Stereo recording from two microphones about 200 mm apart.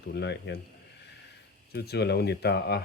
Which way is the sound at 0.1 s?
60° left (ahead or behind).